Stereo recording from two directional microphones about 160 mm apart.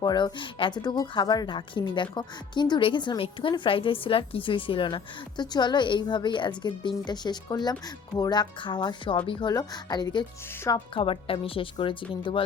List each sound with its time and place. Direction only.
0.0 s speech: 25° left (ahead or behind)